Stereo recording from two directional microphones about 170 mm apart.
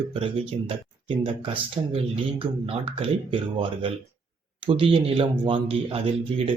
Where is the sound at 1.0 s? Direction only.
30° right (ahead or behind).